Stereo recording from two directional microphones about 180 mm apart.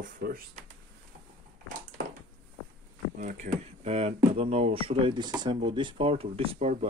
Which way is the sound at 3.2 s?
40° right (ahead or behind).